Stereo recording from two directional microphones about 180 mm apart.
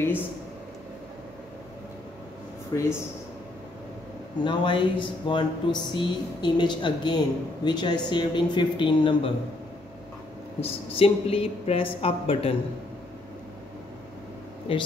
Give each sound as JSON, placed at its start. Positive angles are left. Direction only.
{"t": 2.7, "sound": "speech", "side_deg": 20}
{"t": 4.5, "sound": "speech", "side_deg": 25}
{"t": 10.6, "sound": "a woman's voice", "side_deg": 30}
{"t": 14.7, "sound": "a woman's voice", "side_deg": 30}